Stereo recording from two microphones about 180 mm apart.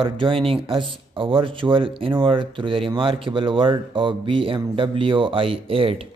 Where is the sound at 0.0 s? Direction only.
30° right (ahead or behind).